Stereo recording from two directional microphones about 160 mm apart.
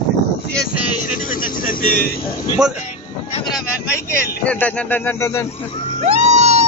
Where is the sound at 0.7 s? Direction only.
60° left (ahead or behind).